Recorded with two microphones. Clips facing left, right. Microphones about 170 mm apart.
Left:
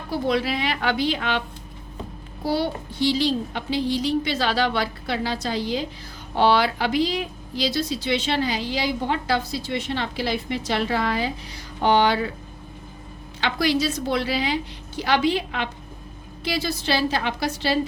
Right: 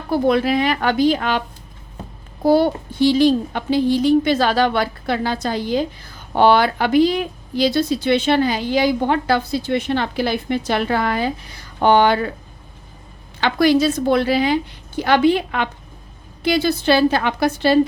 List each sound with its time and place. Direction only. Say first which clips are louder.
0.1 s speech: right 7 dB; 50° right (ahead or behind)
2.4 s speech: right 9 dB; 50° right (ahead or behind)
13.4 s a woman's voice: right 7 dB; 50° right (ahead or behind)